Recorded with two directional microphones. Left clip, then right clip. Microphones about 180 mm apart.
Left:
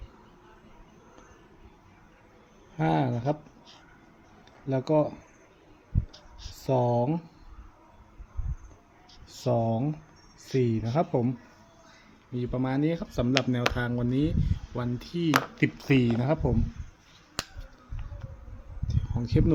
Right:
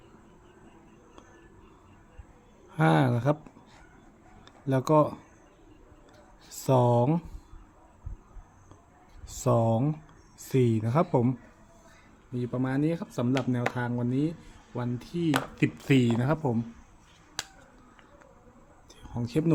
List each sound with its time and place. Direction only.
2.7 s speech: 35° right (ahead or behind)
4.6 s speech: 30° right (ahead or behind)
6.5 s speech: 35° right (ahead or behind)
9.3 s speech: 30° right (ahead or behind)
12.3 s speech: centre (ahead or behind)
18.9 s a sound: 15° right (ahead or behind)